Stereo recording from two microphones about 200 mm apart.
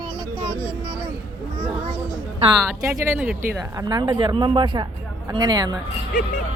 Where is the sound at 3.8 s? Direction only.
20° right (ahead or behind).